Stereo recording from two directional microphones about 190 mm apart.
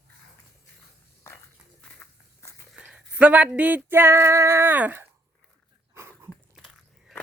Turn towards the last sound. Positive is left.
turn(degrees=0)  # may be behind; listen again after turning